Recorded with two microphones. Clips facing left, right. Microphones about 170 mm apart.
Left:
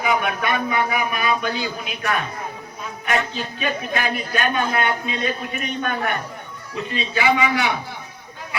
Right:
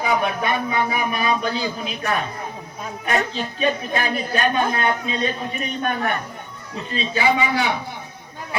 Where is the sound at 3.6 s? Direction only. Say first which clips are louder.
Right 2 dB; 30° right (ahead or behind).